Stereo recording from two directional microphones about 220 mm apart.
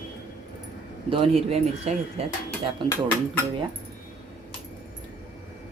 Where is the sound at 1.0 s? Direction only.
25° right (ahead or behind).